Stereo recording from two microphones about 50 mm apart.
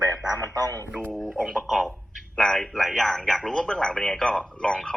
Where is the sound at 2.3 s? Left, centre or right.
Centre.